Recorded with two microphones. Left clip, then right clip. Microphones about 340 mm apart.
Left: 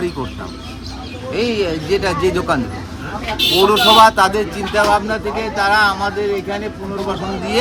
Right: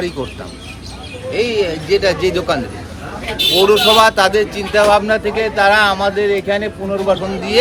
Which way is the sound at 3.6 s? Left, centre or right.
Centre.